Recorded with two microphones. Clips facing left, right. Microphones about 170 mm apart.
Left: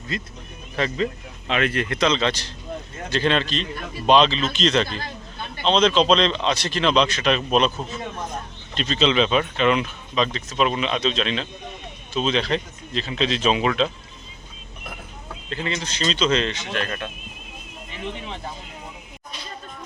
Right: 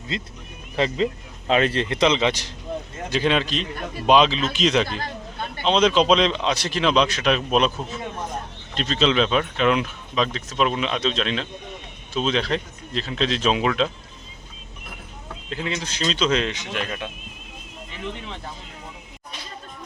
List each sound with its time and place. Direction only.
0.8 s speech: 25° right (ahead or behind); by 13.9 s centre (ahead or behind)
15.4 s speech: 5° right (ahead or behind)